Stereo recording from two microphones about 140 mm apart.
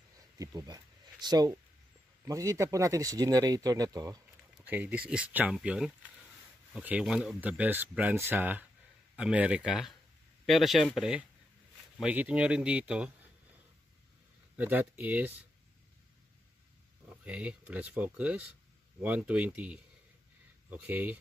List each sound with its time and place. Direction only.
0.4 s speech: 30° right (ahead or behind)
4.6 s speech: 10° right (ahead or behind)
14.6 s speech: 10° right (ahead or behind)
17.2 s speech: 10° right (ahead or behind)